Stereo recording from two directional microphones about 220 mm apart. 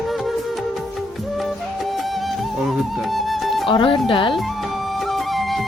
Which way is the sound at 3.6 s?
25° left (ahead or behind).